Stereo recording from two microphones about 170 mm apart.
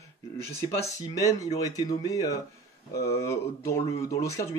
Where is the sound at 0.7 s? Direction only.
20° left (ahead or behind).